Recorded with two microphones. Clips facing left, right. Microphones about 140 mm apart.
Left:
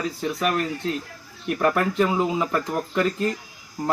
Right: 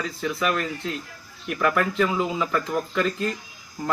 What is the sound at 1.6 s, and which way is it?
A man's voice, 35° left (ahead or behind).